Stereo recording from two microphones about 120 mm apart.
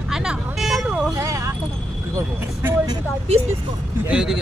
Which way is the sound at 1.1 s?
25° right (ahead or behind).